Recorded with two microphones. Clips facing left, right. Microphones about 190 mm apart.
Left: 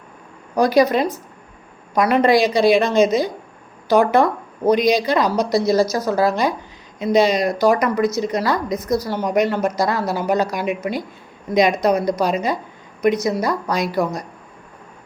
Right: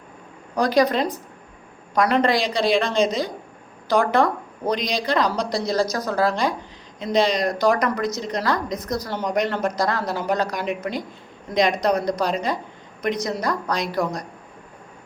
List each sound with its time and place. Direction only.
0.5 s a woman's voice: 10° left (ahead or behind)
4.0 s a woman's voice: 20° left (ahead or behind)